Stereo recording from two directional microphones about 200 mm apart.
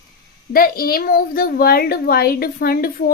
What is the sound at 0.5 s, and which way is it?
A woman's voice, 45° left (ahead or behind).